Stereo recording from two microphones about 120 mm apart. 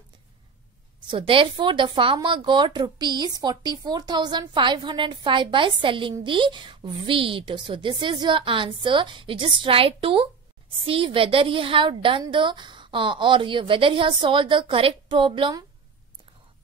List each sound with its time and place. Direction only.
1.0 s a woman's voice: 45° right (ahead or behind)